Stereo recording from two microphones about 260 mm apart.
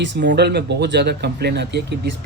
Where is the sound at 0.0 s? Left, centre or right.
Right.